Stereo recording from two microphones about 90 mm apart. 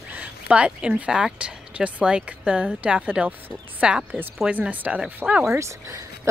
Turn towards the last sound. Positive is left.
turn(degrees=-30)  # may be behind; listen again after turning